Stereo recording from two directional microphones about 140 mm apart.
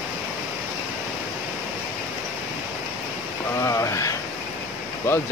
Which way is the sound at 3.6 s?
20° left (ahead or behind).